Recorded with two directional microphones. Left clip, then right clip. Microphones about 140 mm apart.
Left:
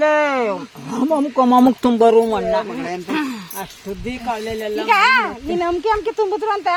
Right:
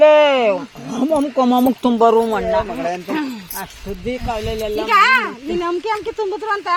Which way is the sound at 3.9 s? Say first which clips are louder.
Left 2 dB; 55° left (ahead or behind).